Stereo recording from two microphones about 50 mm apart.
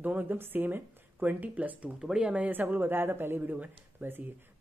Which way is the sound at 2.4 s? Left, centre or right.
Right.